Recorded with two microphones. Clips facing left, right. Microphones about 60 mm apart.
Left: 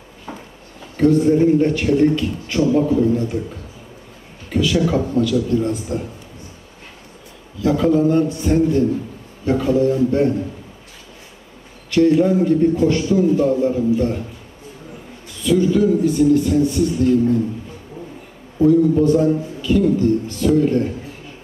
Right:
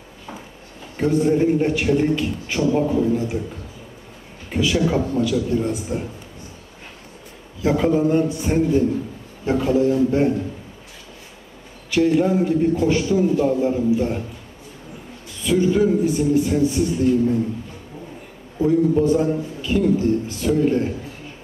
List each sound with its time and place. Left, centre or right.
0.9 s a man's voice: centre
4.5 s a man's voice: centre
7.6 s a man's voice: right
11.9 s a man's voice: centre
15.4 s a man's voice: centre
18.7 s a man's voice: right